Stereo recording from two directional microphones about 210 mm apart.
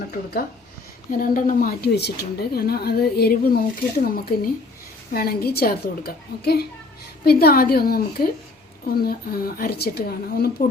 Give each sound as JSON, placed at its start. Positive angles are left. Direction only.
{"t": 1.2, "sound": "speech", "side_deg": 40}